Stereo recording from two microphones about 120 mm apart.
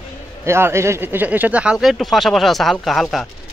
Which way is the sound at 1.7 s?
Centre (ahead or behind).